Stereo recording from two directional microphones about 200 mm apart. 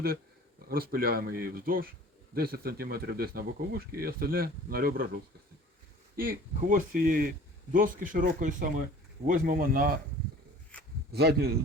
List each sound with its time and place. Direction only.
0.7 s speech: 50° right (ahead or behind)
6.1 s speech: 45° right (ahead or behind)
10.7 s a sound: 5° left (ahead or behind)
11.1 s speech: 55° right (ahead or behind)